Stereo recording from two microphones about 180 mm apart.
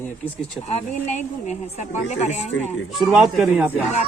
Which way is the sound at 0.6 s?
40° left (ahead or behind).